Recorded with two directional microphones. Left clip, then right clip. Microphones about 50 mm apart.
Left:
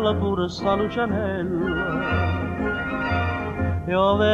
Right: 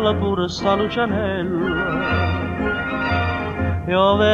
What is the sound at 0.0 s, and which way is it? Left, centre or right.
Music, right.